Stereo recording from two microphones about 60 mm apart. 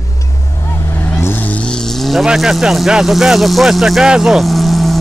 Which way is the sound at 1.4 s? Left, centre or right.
Left.